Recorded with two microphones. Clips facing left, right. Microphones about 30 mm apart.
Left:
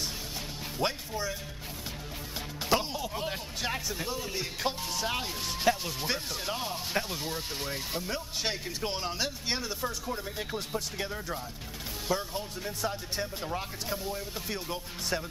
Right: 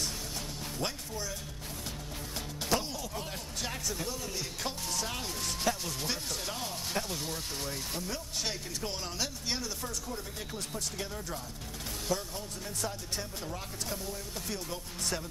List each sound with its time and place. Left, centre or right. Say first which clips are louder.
0.7 s speech: left 6 dB; left
2.7 s speech: left 4 dB; left